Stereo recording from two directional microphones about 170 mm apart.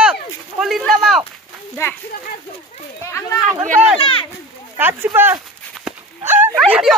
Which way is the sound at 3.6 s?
50° right (ahead or behind).